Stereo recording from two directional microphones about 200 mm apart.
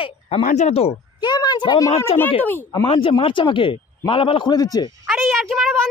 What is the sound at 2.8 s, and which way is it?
A man's voice, 25° left (ahead or behind).